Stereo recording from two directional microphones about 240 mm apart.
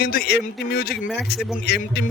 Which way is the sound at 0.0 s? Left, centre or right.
Left.